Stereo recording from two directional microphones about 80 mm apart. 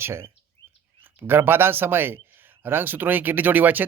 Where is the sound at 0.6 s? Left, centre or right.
Right.